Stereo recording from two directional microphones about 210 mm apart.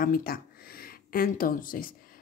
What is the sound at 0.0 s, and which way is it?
Speech, 45° left (ahead or behind).